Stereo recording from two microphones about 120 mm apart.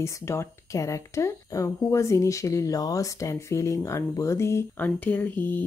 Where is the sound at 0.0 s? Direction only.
25° left (ahead or behind).